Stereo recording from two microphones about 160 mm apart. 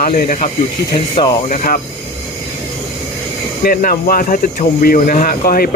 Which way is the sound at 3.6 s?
65° left (ahead or behind).